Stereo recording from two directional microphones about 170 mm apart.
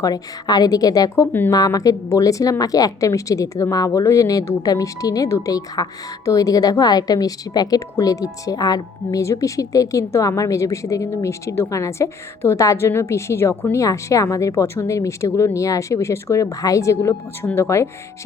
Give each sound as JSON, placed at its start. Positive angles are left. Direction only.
{"t": 0.0, "sound": "a woman's voice", "side_deg": 25}